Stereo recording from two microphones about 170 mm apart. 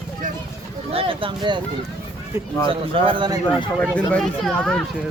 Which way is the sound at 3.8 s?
5° left (ahead or behind).